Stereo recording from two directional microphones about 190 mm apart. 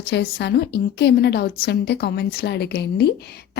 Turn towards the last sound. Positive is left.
turn(degrees=60)  # may be behind; listen again after turning